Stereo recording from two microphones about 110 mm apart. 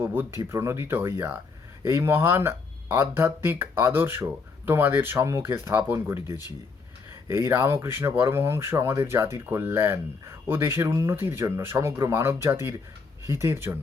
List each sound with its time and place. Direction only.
0.0 s speech: 20° right (ahead or behind)